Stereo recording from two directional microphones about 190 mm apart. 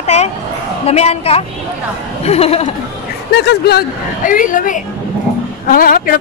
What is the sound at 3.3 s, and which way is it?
Speech, 60° left (ahead or behind).